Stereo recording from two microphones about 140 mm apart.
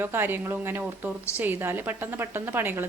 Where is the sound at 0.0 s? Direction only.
15° right (ahead or behind).